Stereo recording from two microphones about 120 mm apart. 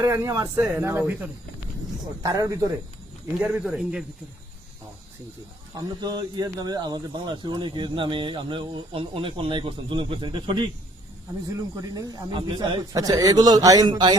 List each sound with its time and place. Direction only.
0.0 s a man's voice: 25° right (ahead or behind)
0.5 s speech: 15° right (ahead or behind)
2.2 s a man's voice: 30° right (ahead or behind)
3.4 s speech: 10° right (ahead or behind)
5.7 s speech: 35° right (ahead or behind)
11.8 s a man's voice: 30° right (ahead or behind)
12.3 s a man's voice: 40° right (ahead or behind)